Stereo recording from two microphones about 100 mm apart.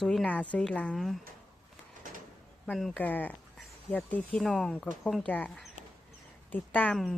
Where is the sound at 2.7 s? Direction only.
5° left (ahead or behind).